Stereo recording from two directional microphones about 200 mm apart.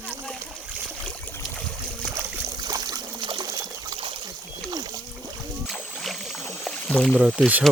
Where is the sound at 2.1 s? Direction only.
20° right (ahead or behind).